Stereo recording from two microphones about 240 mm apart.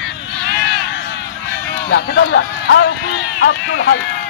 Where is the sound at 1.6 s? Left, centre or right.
Left.